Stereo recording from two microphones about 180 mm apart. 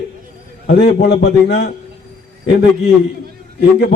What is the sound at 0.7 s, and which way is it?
Speech, 70° left (ahead or behind).